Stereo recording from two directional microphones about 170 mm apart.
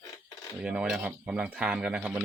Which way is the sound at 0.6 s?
5° right (ahead or behind).